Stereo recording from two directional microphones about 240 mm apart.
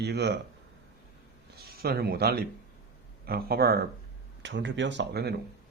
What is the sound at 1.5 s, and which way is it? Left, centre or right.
Speech, right.